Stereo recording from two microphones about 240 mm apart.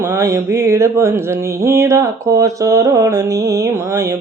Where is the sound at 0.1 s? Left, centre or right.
Centre.